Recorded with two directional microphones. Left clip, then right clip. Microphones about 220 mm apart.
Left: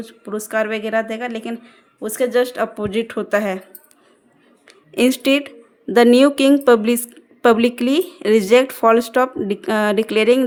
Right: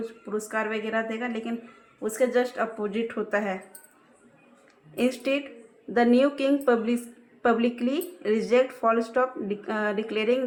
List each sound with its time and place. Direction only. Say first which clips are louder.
0.0 s speech: left 4 dB; 45° left (ahead or behind)
4.9 s speech: left 10 dB; 50° left (ahead or behind)